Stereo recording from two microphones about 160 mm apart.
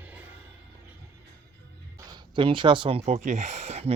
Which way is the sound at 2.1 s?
30° right (ahead or behind).